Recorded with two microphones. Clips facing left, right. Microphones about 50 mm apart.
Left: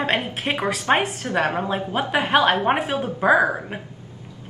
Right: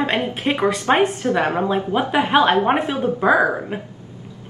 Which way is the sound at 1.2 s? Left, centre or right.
Centre.